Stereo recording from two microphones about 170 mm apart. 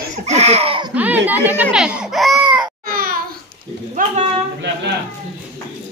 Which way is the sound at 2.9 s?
60° right (ahead or behind).